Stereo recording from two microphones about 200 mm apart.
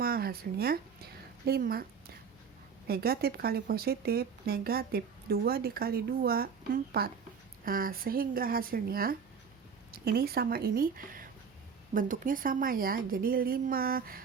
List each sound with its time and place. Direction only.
0.0 s a woman's voice: 50° right (ahead or behind)